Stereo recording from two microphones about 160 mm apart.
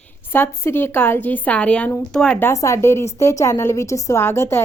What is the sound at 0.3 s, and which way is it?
A woman's voice, 15° left (ahead or behind).